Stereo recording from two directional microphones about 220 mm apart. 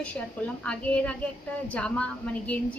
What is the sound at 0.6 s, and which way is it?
A woman's voice, 5° left (ahead or behind).